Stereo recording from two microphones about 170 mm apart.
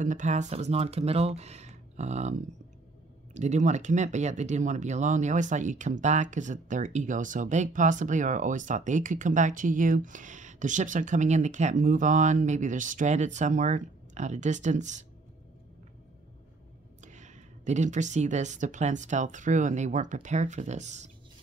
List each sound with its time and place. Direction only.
0.0 s speech: 45° right (ahead or behind)
17.0 s speech: 45° right (ahead or behind)